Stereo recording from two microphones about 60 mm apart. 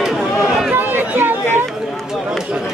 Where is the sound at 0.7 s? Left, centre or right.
Right.